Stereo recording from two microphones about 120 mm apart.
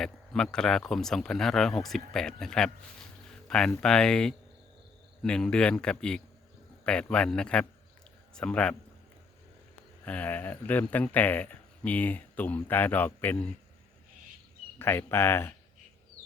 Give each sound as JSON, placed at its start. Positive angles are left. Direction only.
{"t": 0.0, "sound": "a man's voice", "side_deg": 5}
{"t": 10.0, "sound": "speech", "side_deg": 10}
{"t": 14.8, "sound": "speech", "side_deg": 20}